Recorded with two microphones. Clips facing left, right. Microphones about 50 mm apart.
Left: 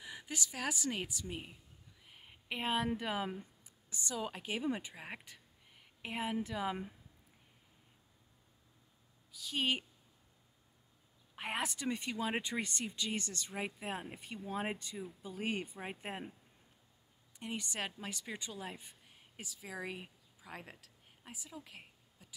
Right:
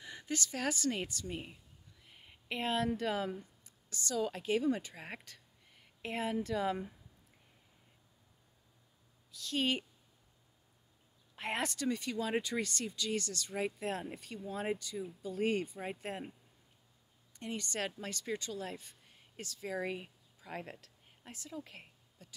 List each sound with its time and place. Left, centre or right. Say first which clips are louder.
0.0 s a woman's voice: right 3 dB; centre
2.0 s a sound: right 1 dB; centre
3.0 s a woman's voice: right 3 dB; centre
9.3 s speech: right 1 dB; centre
11.3 s speech: right 2 dB; centre
11.8 s speech: right 2 dB; left
15.0 s speech: right 6 dB; centre
17.4 s speech: right 2 dB; centre